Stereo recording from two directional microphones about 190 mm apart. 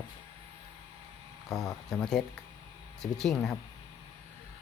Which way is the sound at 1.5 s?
Centre (ahead or behind).